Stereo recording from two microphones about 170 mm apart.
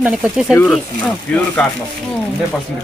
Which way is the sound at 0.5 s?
10° left (ahead or behind).